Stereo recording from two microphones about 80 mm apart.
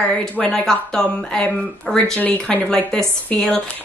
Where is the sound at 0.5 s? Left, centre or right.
Centre.